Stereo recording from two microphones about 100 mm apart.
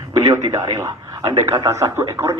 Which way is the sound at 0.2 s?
35° right (ahead or behind).